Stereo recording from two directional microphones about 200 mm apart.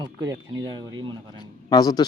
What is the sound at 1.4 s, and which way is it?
Speech, 20° left (ahead or behind).